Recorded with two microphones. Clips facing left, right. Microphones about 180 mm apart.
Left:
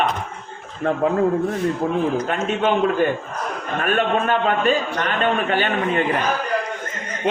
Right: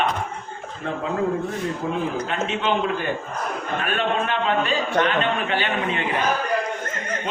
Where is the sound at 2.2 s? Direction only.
50° left (ahead or behind).